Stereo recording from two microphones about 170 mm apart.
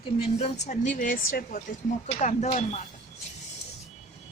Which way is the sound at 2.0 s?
45° left (ahead or behind).